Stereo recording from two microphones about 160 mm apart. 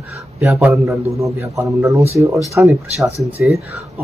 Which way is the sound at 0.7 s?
20° right (ahead or behind).